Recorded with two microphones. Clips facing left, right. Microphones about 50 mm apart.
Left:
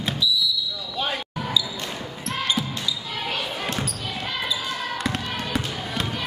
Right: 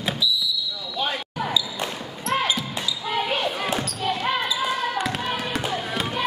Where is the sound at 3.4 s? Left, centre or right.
Centre.